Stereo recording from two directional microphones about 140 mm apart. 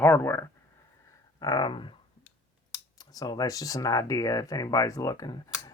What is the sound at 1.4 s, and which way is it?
Speech, 30° left (ahead or behind).